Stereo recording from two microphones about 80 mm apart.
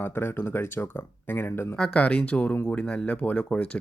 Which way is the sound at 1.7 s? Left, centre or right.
Centre.